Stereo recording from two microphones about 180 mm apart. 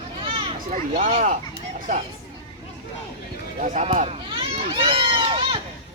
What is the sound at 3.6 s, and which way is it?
Speech, 45° right (ahead or behind).